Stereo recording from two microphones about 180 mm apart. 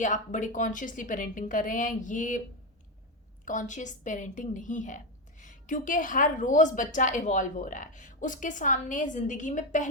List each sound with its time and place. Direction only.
0.0 s a woman's voice: 45° left (ahead or behind)
3.4 s a woman's voice: 45° left (ahead or behind)